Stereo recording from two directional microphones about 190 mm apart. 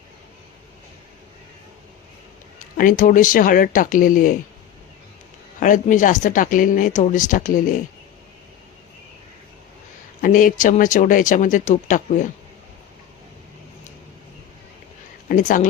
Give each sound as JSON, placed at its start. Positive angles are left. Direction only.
{"t": 2.7, "sound": "speech", "side_deg": 45}
{"t": 5.5, "sound": "speech", "side_deg": 45}
{"t": 10.2, "sound": "speech", "side_deg": 45}
{"t": 15.3, "sound": "speech", "side_deg": 45}